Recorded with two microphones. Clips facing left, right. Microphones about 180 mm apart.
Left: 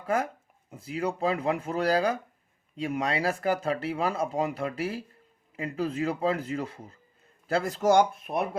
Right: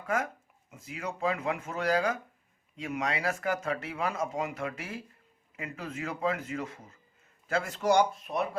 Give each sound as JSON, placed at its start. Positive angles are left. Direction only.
{"t": 0.0, "sound": "speech", "side_deg": 35}